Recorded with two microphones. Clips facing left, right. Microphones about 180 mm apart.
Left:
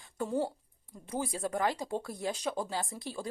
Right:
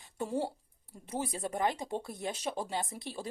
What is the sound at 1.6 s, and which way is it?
Speech, 20° right (ahead or behind).